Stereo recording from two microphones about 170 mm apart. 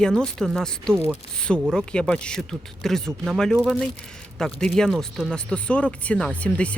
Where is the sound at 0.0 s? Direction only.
5° left (ahead or behind).